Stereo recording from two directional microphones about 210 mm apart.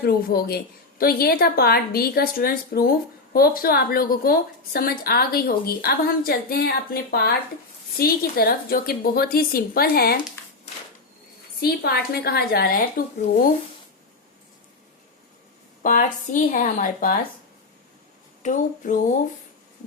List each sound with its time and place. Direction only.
0.0 s a woman's voice: 45° left (ahead or behind)
11.6 s a woman's voice: 45° left (ahead or behind)
15.8 s a woman's voice: 40° left (ahead or behind)
18.4 s a woman's voice: 35° left (ahead or behind)